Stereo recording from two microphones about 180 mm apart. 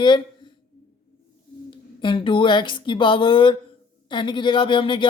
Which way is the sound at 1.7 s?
25° left (ahead or behind).